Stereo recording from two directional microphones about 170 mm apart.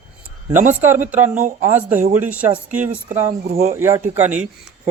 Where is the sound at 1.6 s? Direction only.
10° right (ahead or behind).